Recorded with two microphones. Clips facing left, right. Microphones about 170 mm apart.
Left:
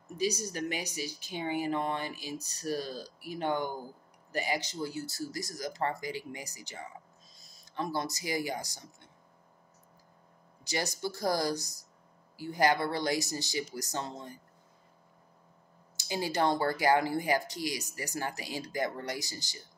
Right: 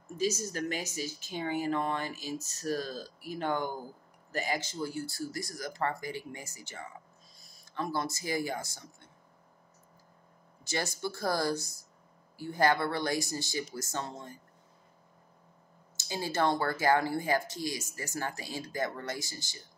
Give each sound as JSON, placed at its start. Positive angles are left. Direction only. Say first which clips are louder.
{"t": 0.2, "sound": "speech", "louder": "even", "side_deg": 15}
{"t": 2.0, "sound": "music", "louder": "right 1 dB", "side_deg": -45}
{"t": 2.6, "sound": "speech", "louder": "even", "side_deg": 15}
{"t": 10.6, "sound": "speech", "louder": "even", "side_deg": 15}
{"t": 16.0, "sound": "speech", "louder": "left 1 dB", "side_deg": 15}